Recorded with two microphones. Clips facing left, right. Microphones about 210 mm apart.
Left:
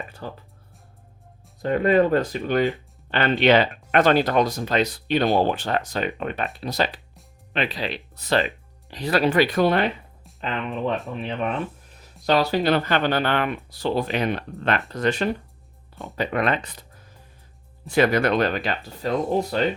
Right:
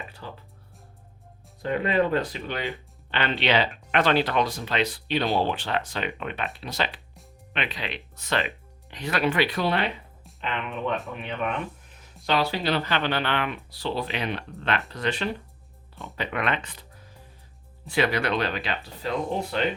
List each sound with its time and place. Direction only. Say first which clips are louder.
0.2 s speech: left 5 dB; 45° left (ahead or behind)
1.6 s speech: left 5 dB; 45° left (ahead or behind)
10.4 s speech: left 4 dB; 35° left (ahead or behind)
17.8 s speech: left 5 dB; 45° left (ahead or behind)